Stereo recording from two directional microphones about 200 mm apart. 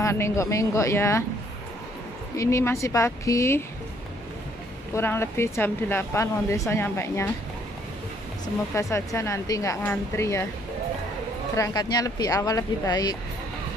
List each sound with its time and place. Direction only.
0.0 s speech: 15° left (ahead or behind)
2.3 s speech: 15° left (ahead or behind)
4.9 s speech: 10° left (ahead or behind)
8.7 s speech: 15° left (ahead or behind)
11.5 s speech: 15° left (ahead or behind)